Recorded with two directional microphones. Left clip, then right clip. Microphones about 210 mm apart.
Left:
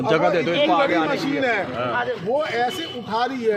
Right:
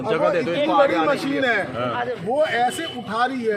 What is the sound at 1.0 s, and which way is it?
Speech, centre (ahead or behind).